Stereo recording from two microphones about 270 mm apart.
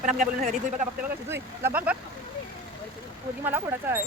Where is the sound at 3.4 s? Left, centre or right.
Centre.